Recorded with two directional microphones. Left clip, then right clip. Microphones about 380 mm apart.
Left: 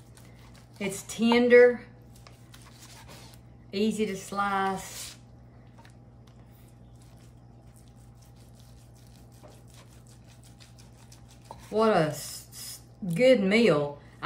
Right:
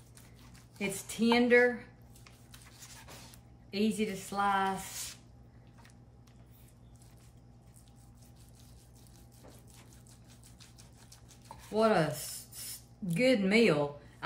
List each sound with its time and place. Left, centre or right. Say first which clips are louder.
0.7 s speech: left 3 dB; centre
3.7 s speech: left 5 dB; centre
11.7 s speech: left 4 dB; centre